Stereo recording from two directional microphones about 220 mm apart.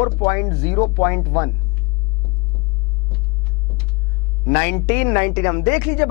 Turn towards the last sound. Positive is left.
turn(degrees=10)  # may be behind; listen again after turning